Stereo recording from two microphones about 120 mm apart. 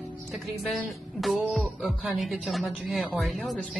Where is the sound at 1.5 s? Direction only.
Centre (ahead or behind).